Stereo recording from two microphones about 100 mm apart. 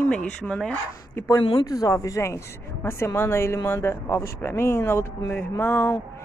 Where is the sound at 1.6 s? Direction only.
35° left (ahead or behind).